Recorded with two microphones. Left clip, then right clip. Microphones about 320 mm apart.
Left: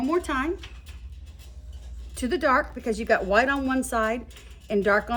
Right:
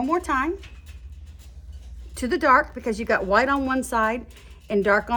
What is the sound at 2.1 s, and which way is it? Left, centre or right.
A woman's voice, centre.